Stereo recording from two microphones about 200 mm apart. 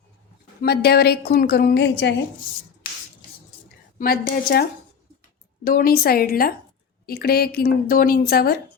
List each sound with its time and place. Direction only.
0.6 s speech: 55° left (ahead or behind)
3.9 s speech: 50° left (ahead or behind)
5.6 s speech: 45° left (ahead or behind)